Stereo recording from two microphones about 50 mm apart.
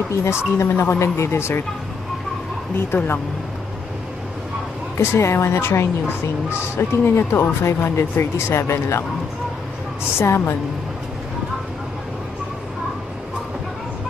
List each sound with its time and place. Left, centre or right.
0.1 s speech: left
2.9 s speech: left
4.9 s speech: left
6.8 s speech: left
10.1 s speech: left